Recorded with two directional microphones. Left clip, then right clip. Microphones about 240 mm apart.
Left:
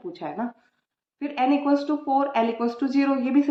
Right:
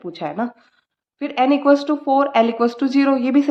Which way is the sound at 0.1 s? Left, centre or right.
Right.